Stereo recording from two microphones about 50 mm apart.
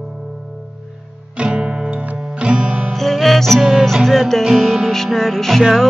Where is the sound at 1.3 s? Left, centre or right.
Right.